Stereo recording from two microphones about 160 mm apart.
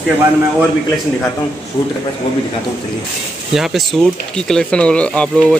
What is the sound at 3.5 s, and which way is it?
Speech, centre (ahead or behind).